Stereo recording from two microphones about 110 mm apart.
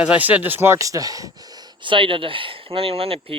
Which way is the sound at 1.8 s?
50° right (ahead or behind).